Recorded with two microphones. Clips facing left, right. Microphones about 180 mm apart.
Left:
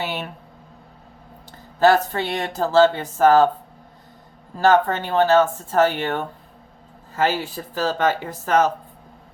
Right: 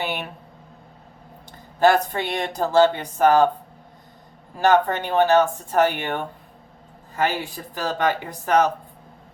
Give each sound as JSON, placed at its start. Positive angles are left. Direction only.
{"t": 0.0, "sound": "a sound", "side_deg": -15}
{"t": 1.8, "sound": "speech", "side_deg": -15}
{"t": 4.6, "sound": "speech", "side_deg": -15}
{"t": 7.7, "sound": "speech", "side_deg": -15}